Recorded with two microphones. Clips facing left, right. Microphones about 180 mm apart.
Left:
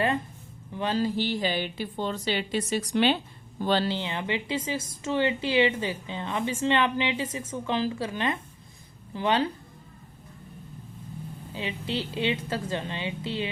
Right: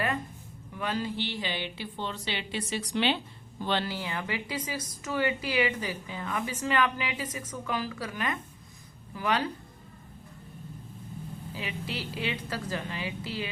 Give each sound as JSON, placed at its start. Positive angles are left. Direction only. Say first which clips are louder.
{"t": 0.7, "sound": "a woman's voice", "louder": "left 5 dB", "side_deg": 30}
{"t": 11.5, "sound": "a woman's voice", "louder": "left 6 dB", "side_deg": 25}